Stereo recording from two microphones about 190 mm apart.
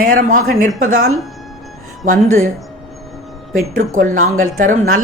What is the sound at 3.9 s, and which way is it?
Speech, 45° right (ahead or behind).